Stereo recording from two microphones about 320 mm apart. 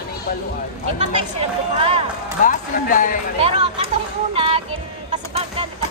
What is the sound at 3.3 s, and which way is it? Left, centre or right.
Speech, centre.